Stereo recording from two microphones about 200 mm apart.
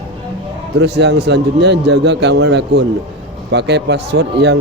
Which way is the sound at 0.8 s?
55° right (ahead or behind).